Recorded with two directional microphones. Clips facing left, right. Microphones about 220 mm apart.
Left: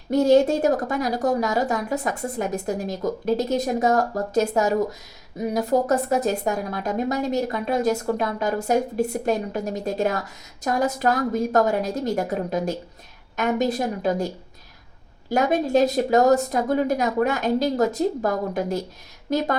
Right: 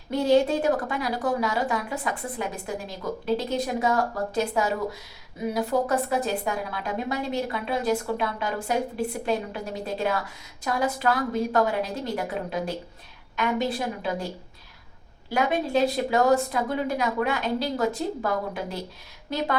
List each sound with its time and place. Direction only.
0.1 s a woman's voice: 45° left (ahead or behind)
15.3 s a woman's voice: 45° left (ahead or behind)